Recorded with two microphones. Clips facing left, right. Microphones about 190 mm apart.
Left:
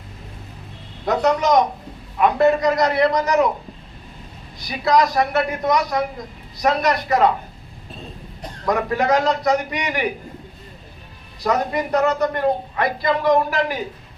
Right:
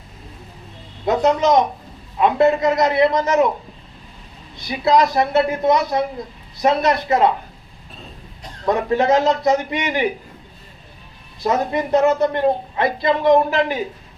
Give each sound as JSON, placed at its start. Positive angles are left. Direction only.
{"t": 1.0, "sound": "a man's voice", "side_deg": -20}
{"t": 4.7, "sound": "a man's voice", "side_deg": -25}
{"t": 8.6, "sound": "a man's voice", "side_deg": -25}
{"t": 11.4, "sound": "a man's voice", "side_deg": -25}